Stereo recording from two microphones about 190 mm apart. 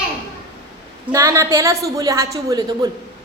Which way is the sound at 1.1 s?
15° right (ahead or behind).